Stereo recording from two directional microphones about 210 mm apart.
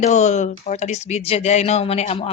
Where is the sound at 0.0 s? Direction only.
35° left (ahead or behind).